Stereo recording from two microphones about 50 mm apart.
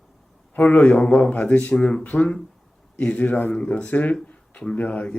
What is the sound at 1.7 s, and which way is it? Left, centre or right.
Speech, centre.